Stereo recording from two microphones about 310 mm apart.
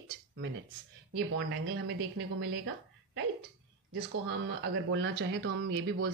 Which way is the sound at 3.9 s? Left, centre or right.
Right.